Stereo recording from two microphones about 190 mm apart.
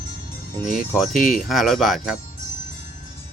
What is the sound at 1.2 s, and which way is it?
Speech, 45° left (ahead or behind).